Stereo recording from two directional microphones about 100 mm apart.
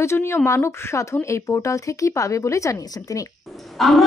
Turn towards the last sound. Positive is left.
turn(degrees=0)  # may be behind; listen again after turning